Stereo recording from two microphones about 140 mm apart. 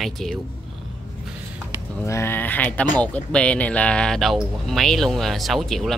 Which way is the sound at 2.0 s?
20° left (ahead or behind).